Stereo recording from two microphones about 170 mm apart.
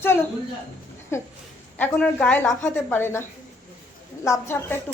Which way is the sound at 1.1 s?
15° left (ahead or behind).